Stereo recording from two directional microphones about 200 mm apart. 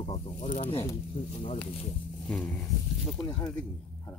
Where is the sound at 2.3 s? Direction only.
5° left (ahead or behind).